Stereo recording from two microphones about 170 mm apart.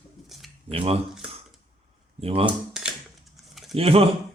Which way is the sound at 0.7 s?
35° right (ahead or behind).